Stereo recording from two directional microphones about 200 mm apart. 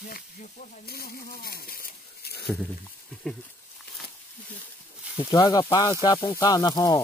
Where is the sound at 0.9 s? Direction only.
50° left (ahead or behind).